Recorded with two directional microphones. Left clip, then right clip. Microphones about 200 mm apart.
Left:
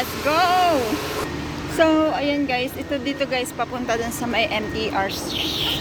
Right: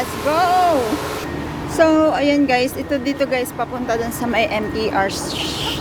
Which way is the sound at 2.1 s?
25° right (ahead or behind).